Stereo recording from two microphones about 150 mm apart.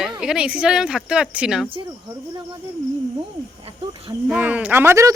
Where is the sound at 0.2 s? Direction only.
5° right (ahead or behind).